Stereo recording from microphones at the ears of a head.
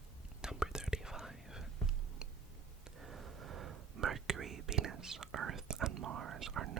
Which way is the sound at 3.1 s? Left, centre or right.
Right.